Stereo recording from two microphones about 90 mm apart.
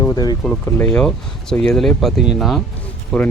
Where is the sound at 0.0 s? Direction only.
45° left (ahead or behind).